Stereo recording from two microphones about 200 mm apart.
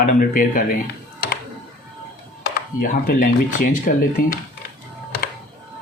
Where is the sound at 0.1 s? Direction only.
45° left (ahead or behind).